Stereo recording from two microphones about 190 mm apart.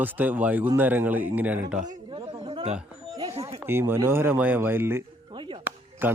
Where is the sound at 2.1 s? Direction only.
30° right (ahead or behind).